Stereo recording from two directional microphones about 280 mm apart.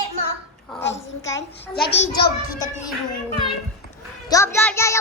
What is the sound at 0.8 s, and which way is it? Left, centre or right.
Speech, left.